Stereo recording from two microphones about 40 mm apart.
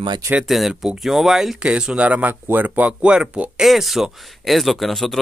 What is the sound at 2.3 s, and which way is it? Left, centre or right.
Speech, right.